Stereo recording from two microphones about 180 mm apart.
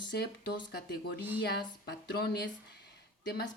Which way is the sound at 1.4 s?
60° left (ahead or behind).